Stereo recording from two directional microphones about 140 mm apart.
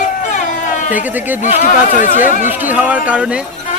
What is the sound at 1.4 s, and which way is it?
Speech, 65° left (ahead or behind).